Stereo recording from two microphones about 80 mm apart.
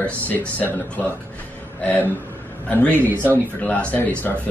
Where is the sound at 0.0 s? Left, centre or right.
Centre.